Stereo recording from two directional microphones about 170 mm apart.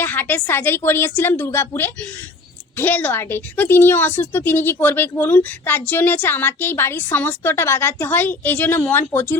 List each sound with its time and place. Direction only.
0.0 s a woman's voice: 10° left (ahead or behind)